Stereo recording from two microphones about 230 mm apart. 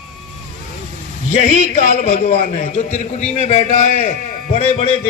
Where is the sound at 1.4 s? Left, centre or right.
Left.